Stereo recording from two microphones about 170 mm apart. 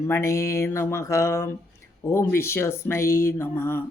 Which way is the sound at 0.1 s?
15° left (ahead or behind).